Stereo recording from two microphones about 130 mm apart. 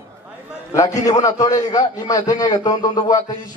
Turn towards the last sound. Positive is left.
turn(degrees=30)  # may be behind; listen again after turning